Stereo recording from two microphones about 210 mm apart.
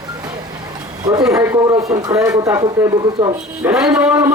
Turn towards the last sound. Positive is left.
turn(degrees=-10)  # may be behind; listen again after turning